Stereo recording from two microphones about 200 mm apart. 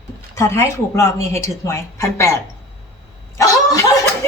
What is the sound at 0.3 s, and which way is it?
A woman's voice, 15° left (ahead or behind).